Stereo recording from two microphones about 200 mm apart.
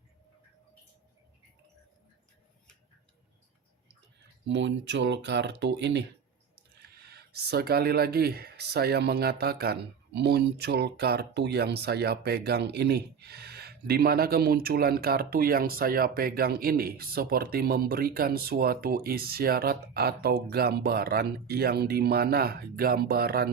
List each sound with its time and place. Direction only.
4.4 s speech: 65° right (ahead or behind)